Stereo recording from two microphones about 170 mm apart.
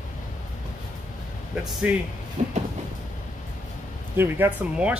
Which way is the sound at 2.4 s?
45° right (ahead or behind).